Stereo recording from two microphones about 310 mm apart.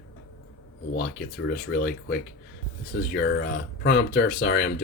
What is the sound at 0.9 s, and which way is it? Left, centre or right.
Speech, left.